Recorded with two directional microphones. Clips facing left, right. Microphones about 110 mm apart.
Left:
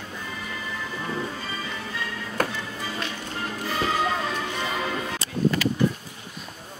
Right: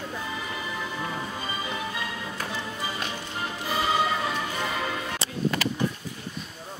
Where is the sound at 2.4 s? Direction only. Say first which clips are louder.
Left 10 dB; 55° left (ahead or behind).